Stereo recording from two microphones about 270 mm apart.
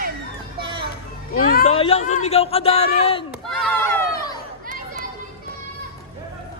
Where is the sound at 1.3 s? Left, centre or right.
Left.